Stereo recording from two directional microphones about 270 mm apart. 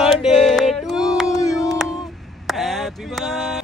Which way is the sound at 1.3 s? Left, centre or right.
Centre.